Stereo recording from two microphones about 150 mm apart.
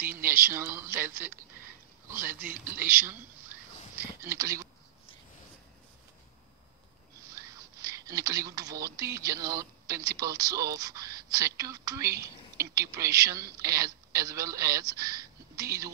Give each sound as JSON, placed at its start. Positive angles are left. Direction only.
{"t": 0.0, "sound": "speech", "side_deg": -15}
{"t": 2.7, "sound": "speech", "side_deg": -10}
{"t": 7.3, "sound": "a sound", "side_deg": -20}
{"t": 9.1, "sound": "speech", "side_deg": -25}